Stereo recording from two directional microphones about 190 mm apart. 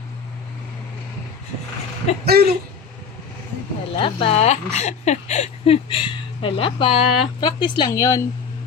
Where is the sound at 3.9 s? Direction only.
25° left (ahead or behind).